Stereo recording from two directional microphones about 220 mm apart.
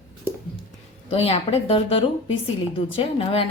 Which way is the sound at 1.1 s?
25° left (ahead or behind).